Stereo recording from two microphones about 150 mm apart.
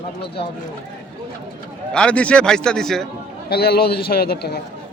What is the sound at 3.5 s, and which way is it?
A man's voice, 90° left.